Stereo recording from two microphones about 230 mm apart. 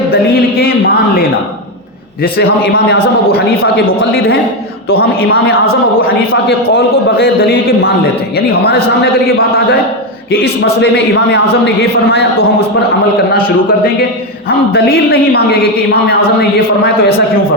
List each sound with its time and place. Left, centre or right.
0.1 s a man's voice: left
2.2 s a man's voice: left
4.9 s a man's voice: left
14.7 s a man's voice: left
16.8 s a man's voice: left